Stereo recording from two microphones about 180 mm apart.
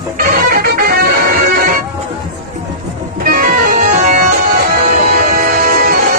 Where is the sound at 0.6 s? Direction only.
55° right (ahead or behind).